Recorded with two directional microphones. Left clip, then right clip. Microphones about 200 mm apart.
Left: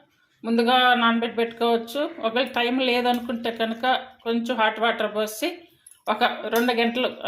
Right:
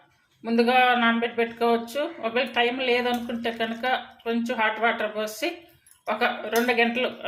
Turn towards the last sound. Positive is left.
turn(degrees=20)  # may be behind; listen again after turning